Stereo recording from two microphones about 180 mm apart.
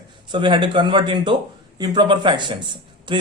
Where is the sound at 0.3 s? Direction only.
25° right (ahead or behind).